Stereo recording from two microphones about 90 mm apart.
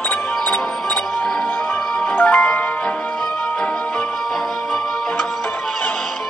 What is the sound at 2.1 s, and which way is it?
Music, 20° left (ahead or behind).